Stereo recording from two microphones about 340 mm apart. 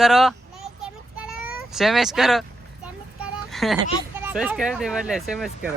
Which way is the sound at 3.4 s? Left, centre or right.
Centre.